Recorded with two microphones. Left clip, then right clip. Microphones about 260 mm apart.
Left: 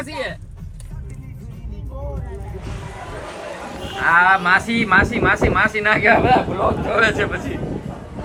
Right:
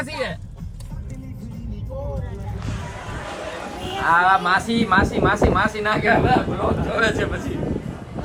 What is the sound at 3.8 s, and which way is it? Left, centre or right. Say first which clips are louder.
Speech: left 3 dB; centre.